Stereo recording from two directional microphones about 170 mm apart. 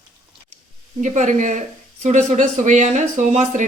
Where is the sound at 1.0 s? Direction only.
45° right (ahead or behind).